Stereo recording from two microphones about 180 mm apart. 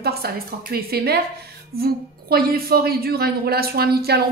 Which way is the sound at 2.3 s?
60° right (ahead or behind).